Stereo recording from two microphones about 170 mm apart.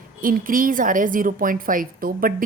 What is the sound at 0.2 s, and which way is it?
Speech, 55° right (ahead or behind).